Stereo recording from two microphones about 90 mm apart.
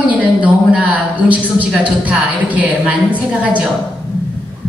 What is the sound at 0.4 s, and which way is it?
A woman's voice, 15° right (ahead or behind).